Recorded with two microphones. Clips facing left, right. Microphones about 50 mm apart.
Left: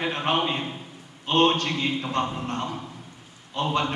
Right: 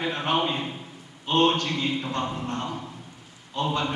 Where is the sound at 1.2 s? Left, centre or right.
Left.